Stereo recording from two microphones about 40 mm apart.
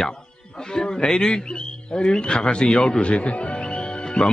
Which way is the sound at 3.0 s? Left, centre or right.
Left.